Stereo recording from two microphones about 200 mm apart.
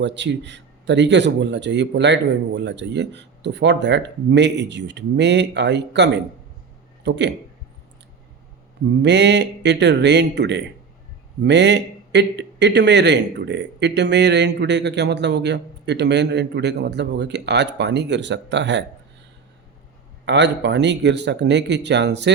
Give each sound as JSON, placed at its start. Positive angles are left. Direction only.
{"t": 0.0, "sound": "a man's voice", "side_deg": -60}
{"t": 9.0, "sound": "a man's voice", "side_deg": -60}
{"t": 20.2, "sound": "a man's voice", "side_deg": -60}